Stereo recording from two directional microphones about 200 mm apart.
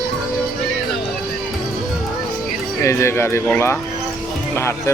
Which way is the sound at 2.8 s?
15° left (ahead or behind).